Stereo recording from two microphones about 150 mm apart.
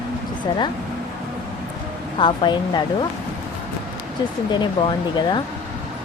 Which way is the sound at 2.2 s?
30° left (ahead or behind).